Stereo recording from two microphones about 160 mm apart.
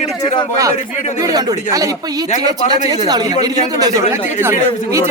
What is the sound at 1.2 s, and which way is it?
Speech, 25° right (ahead or behind).